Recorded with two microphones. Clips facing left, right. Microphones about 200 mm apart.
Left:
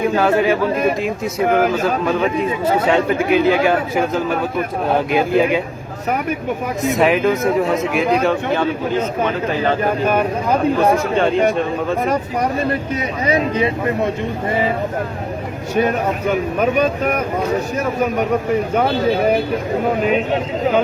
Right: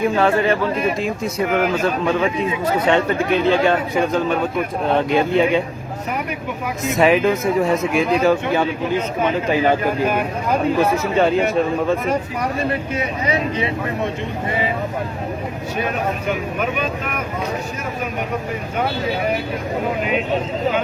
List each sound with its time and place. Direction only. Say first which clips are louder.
0.2 s a man's voice: left 3 dB; 5° left (ahead or behind)
6.9 s a man's voice: right 1 dB; centre (ahead or behind)
8.6 s speech: left 2 dB; 15° right (ahead or behind)
11.2 s a man's voice: even; 5° right (ahead or behind)
16.6 s speech: left 6 dB; 40° left (ahead or behind)